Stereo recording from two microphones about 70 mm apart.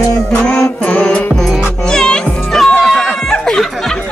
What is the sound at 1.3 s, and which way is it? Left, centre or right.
Music, centre.